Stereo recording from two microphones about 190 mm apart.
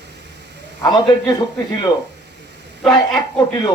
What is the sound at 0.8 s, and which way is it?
Speech, 20° left (ahead or behind).